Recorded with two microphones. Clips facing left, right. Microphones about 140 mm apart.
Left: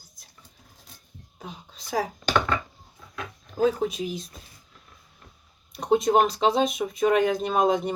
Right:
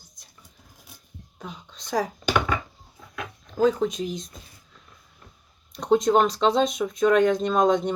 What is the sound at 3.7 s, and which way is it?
Speech, 5° left (ahead or behind).